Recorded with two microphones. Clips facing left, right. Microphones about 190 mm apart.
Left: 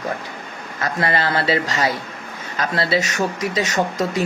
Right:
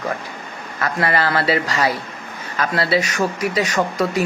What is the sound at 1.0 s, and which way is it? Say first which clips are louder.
Speech: right 1 dB; 25° left (ahead or behind).